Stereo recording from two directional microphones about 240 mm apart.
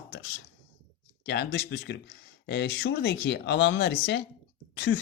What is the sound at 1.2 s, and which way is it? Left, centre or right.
Speech, left.